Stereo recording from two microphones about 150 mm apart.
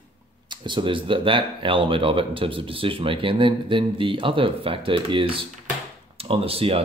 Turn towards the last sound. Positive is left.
turn(degrees=-40)  # may be behind; listen again after turning